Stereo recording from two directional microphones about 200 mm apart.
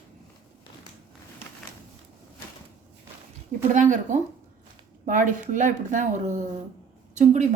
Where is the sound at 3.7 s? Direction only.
40° right (ahead or behind).